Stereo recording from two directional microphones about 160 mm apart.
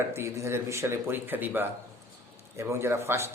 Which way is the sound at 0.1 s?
15° right (ahead or behind).